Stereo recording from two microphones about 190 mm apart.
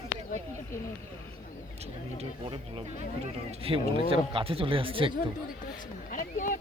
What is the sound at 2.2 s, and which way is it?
Speech, 30° right (ahead or behind).